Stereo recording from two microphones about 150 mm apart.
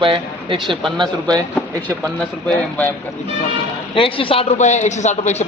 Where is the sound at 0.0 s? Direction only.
35° right (ahead or behind).